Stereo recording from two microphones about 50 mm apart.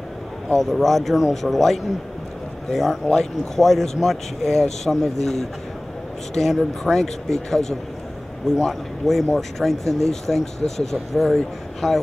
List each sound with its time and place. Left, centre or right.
0.6 s speech: centre